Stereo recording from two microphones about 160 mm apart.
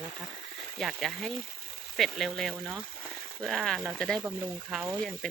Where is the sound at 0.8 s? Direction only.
Centre (ahead or behind).